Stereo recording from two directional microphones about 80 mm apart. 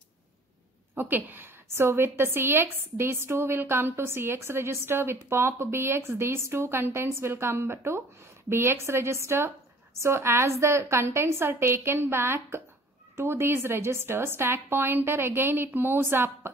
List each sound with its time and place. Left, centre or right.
0.9 s a woman's voice: right